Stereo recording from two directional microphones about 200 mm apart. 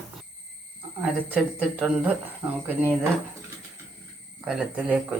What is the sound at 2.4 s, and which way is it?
Speech, 20° right (ahead or behind).